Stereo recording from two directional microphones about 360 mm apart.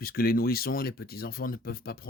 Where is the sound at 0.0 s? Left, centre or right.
Left.